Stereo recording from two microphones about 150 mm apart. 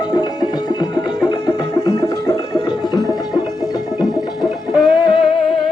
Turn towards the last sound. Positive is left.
turn(degrees=30)  # may be behind; listen again after turning